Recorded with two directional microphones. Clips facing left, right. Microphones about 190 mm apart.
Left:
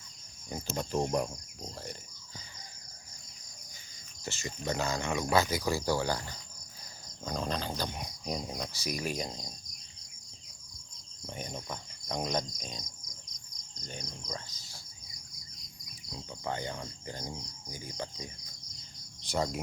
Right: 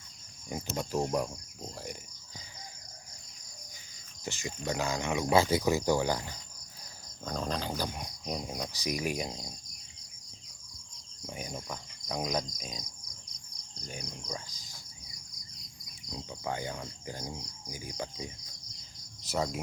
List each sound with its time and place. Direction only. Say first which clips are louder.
0.5 s cricket: even; 5° right (ahead or behind)
4.2 s speech: right 1 dB; 15° right (ahead or behind)
5.3 s speech: right 4 dB; 25° right (ahead or behind)
7.3 s cricket: even; centre (ahead or behind)
7.7 s speech: right 1 dB; 5° right (ahead or behind)
11.3 s cricket: even; 5° right (ahead or behind)
13.8 s cricket: right 1 dB; 10° right (ahead or behind)
16.1 s speech: right 1 dB; 10° right (ahead or behind)